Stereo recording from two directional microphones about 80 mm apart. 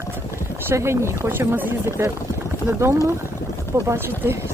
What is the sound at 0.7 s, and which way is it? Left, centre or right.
Speech, right.